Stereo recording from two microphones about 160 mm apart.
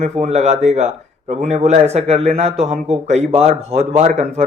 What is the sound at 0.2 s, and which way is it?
Speech, 45° right (ahead or behind).